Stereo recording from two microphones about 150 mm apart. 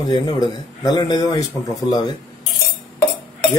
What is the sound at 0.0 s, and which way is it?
Speech, 30° left (ahead or behind).